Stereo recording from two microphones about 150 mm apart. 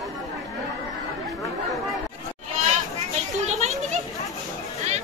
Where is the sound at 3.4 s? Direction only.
45° right (ahead or behind).